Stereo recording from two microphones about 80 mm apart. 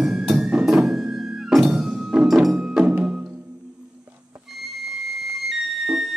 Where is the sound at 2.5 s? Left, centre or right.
Centre.